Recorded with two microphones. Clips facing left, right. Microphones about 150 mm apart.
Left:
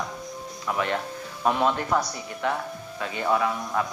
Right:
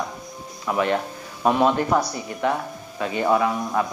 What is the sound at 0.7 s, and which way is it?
Speech, 20° right (ahead or behind).